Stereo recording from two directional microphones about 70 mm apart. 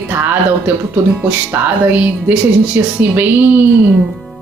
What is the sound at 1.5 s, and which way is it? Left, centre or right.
Speech, right.